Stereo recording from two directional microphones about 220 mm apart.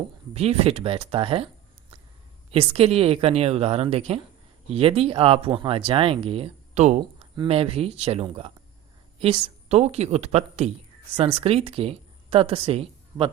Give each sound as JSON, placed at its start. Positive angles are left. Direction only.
{"t": 0.3, "sound": "speech", "side_deg": -30}
{"t": 2.5, "sound": "speech", "side_deg": -25}